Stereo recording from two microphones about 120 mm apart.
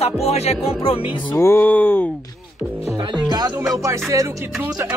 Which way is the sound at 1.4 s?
20° left (ahead or behind).